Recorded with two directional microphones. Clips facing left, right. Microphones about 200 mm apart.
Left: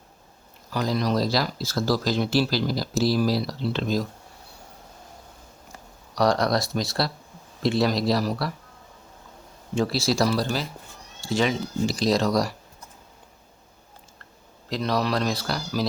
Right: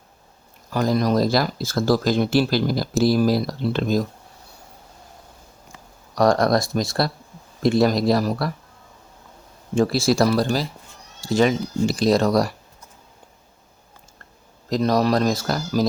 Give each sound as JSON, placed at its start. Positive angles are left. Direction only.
{"t": 0.7, "sound": "speech", "side_deg": -50}
{"t": 6.1, "sound": "speech", "side_deg": -50}
{"t": 9.7, "sound": "speech", "side_deg": -50}
{"t": 14.7, "sound": "speech", "side_deg": -45}